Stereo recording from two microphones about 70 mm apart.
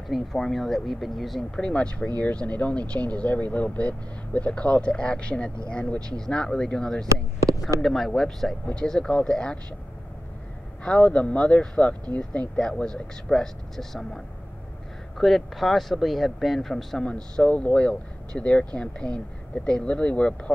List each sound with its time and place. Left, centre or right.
0.1 s speech: centre
1.6 s speech: centre
10.8 s speech: centre
17.1 s speech: centre